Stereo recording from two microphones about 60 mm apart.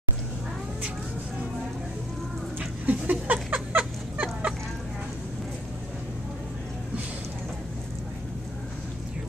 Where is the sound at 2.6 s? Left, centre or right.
Right.